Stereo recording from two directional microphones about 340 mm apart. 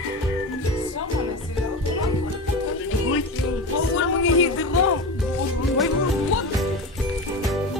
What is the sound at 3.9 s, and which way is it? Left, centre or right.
Music, left.